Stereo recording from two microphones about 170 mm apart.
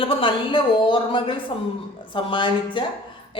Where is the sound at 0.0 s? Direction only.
30° left (ahead or behind).